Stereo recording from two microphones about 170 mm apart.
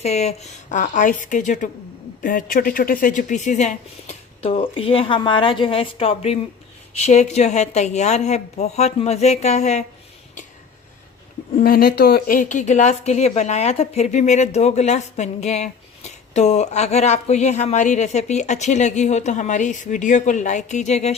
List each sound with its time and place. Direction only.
0.0 s a woman's voice: 40° left (ahead or behind)
11.5 s a woman's voice: 60° left (ahead or behind); by 21.2 s 40° left (ahead or behind)